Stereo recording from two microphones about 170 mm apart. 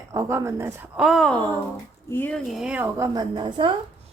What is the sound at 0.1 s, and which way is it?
Speech, 15° right (ahead or behind).